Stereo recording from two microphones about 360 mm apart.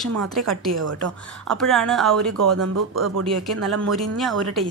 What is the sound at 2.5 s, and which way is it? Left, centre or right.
Speech, right.